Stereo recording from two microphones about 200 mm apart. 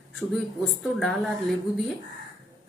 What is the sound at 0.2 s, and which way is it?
A woman's voice, centre (ahead or behind).